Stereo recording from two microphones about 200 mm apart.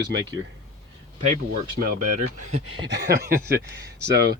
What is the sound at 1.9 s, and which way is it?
Speech, 35° right (ahead or behind).